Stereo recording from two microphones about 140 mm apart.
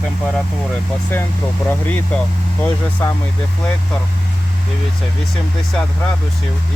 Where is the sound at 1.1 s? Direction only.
15° left (ahead or behind).